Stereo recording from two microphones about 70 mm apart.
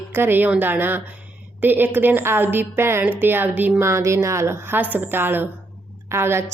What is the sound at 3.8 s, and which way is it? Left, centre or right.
A woman's voice, right.